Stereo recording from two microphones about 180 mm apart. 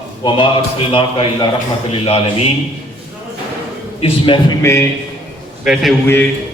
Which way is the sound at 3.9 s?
30° left (ahead or behind).